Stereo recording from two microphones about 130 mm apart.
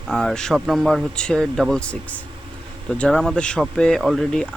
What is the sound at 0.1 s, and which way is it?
Speech, centre (ahead or behind).